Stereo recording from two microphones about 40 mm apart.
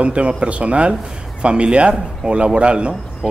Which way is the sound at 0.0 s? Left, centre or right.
Right.